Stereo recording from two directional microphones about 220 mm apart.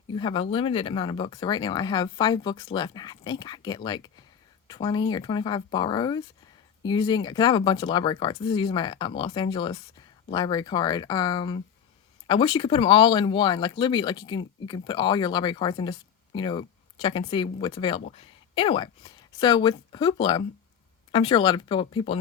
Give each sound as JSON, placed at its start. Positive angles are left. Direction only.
{"t": 0.1, "sound": "speech", "side_deg": 20}